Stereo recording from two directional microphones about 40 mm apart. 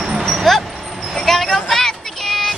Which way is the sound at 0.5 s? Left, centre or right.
Centre.